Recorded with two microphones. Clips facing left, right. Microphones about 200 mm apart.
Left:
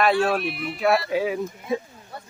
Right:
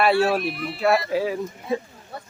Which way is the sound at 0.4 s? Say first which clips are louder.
Right 1 dB; 40° right (ahead or behind).